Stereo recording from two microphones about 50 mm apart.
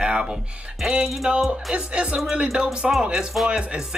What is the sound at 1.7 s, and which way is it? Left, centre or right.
Music, right.